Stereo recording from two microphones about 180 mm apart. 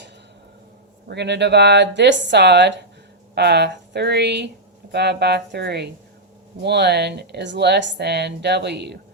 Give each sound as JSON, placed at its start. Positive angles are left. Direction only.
{"t": 1.0, "sound": "speech", "side_deg": -70}